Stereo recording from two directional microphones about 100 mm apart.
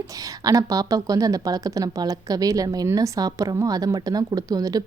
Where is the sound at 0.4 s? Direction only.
35° right (ahead or behind).